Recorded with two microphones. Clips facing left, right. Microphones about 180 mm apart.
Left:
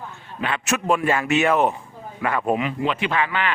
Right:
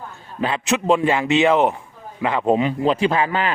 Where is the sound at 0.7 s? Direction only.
20° right (ahead or behind).